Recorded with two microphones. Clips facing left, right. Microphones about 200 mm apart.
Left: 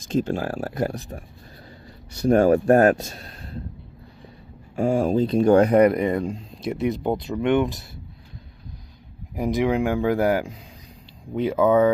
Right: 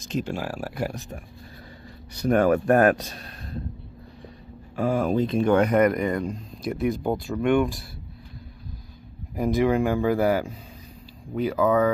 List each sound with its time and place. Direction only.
0.4 s speech: 50° left (ahead or behind)
2.1 s speech: 30° left (ahead or behind)
4.7 s speech: 30° left (ahead or behind)
9.3 s speech: 15° left (ahead or behind)